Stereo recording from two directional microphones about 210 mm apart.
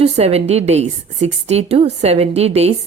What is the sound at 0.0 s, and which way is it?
A woman's voice, 30° right (ahead or behind).